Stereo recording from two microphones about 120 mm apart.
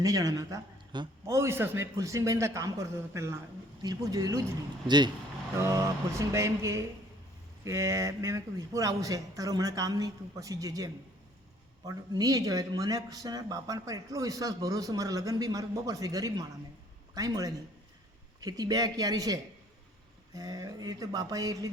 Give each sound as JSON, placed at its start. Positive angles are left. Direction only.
{"t": 0.0, "sound": "speech", "side_deg": -30}
{"t": 4.9, "sound": "speech", "side_deg": -40}
{"t": 5.5, "sound": "speech", "side_deg": -25}